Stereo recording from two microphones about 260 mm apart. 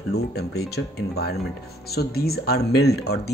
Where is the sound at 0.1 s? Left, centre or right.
Left.